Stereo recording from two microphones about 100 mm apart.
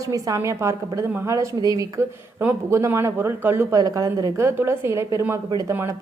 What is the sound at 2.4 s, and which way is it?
A woman's voice, 20° right (ahead or behind).